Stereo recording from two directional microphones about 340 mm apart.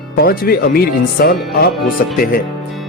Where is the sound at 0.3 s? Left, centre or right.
Left.